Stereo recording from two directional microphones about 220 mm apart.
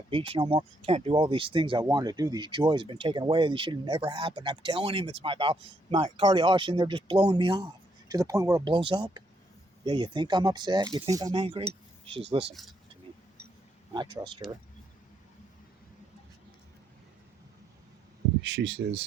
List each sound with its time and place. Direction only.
0.1 s speech: 25° right (ahead or behind)
13.9 s speech: 20° right (ahead or behind)
18.4 s speech: 50° right (ahead or behind)